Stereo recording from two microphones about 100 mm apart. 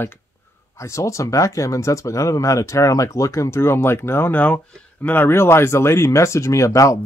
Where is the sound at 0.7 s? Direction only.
30° left (ahead or behind).